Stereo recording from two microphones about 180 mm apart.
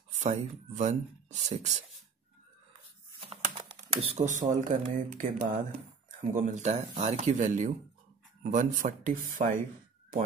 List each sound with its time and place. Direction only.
0.2 s speech: 40° right (ahead or behind)
3.2 s speech: 30° right (ahead or behind); by 9.5 s 50° right (ahead or behind)